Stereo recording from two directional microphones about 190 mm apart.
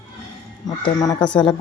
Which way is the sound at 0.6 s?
20° left (ahead or behind).